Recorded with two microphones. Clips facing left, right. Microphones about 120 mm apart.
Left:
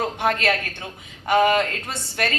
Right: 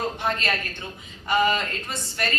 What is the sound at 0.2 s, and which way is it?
A woman's voice, 65° left (ahead or behind).